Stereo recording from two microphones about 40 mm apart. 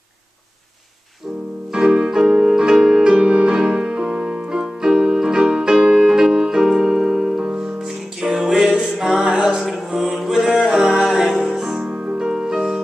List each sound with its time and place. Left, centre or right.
1.7 s music: centre
9.8 s music: centre
11.1 s music: centre